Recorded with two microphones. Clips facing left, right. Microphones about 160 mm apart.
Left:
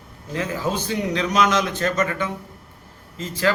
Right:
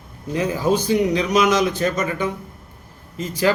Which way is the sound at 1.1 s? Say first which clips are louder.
Right 2 dB; 10° right (ahead or behind).